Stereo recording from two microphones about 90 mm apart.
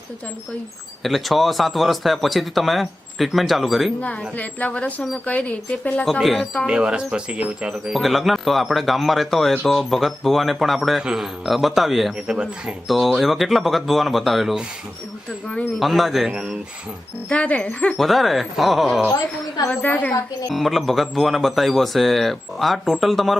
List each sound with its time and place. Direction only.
1.0 s speech: centre (ahead or behind)
4.0 s speech: 15° left (ahead or behind)
6.1 s speech: centre (ahead or behind)
6.7 s speech: 10° right (ahead or behind)
15.8 s speech: centre (ahead or behind)
17.2 s speech: 15° left (ahead or behind)
17.9 s speech: centre (ahead or behind)
19.7 s speech: 15° left (ahead or behind)
20.5 s speech: centre (ahead or behind)